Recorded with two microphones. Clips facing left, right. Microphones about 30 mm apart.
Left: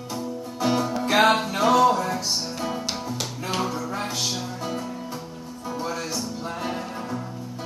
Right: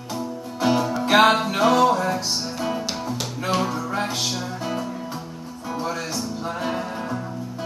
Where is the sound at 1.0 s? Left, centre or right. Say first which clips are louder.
Right 3 dB; right.